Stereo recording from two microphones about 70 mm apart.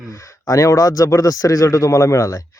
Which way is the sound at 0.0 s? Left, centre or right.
Left.